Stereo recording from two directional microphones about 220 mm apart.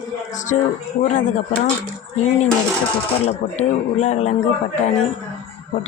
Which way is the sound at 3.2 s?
30° left (ahead or behind).